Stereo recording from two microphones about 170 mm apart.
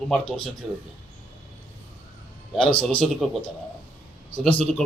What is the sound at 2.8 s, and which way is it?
Speech, centre (ahead or behind).